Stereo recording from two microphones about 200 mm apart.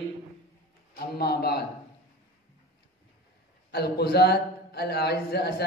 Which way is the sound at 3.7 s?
55° left (ahead or behind).